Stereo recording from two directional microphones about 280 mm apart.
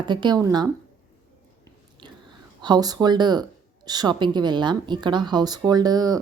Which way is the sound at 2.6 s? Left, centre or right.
Centre.